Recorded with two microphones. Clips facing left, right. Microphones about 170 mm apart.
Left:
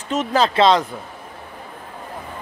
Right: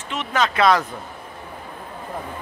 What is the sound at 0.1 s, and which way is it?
Speech, 40° left (ahead or behind).